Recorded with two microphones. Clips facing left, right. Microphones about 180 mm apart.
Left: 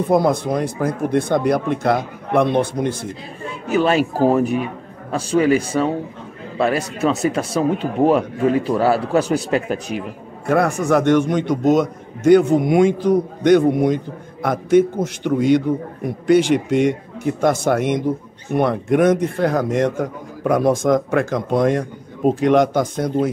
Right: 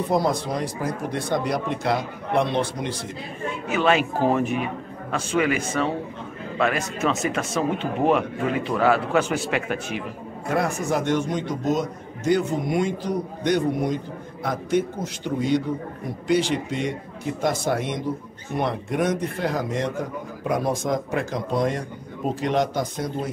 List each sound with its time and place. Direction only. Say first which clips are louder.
0.1 s speech: left 7 dB; 55° left (ahead or behind)
3.6 s speech: left 4 dB; 40° left (ahead or behind)
10.5 s a man's voice: left 7 dB; 60° left (ahead or behind)